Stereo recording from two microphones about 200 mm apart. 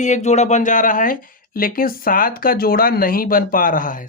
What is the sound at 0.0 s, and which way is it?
Speech, 35° left (ahead or behind).